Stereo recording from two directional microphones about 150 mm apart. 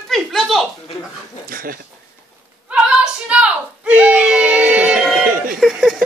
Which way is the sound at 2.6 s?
5° right (ahead or behind).